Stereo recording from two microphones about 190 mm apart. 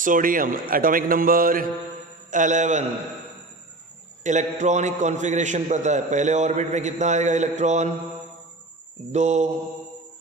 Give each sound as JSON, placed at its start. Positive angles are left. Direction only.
{"t": 0.0, "sound": "a man's voice", "side_deg": -45}
{"t": 4.2, "sound": "a man's voice", "side_deg": -40}
{"t": 9.1, "sound": "a man's voice", "side_deg": -40}